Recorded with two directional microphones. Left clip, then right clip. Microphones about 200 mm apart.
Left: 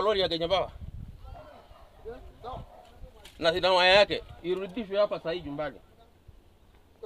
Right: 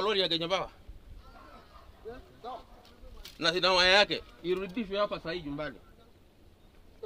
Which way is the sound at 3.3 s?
10° right (ahead or behind).